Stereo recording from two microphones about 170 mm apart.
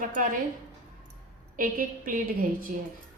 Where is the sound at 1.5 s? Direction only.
55° right (ahead or behind).